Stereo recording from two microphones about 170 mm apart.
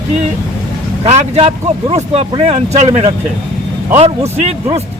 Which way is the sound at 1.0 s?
35° right (ahead or behind).